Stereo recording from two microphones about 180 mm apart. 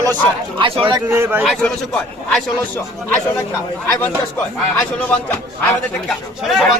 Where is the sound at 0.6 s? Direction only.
30° right (ahead or behind).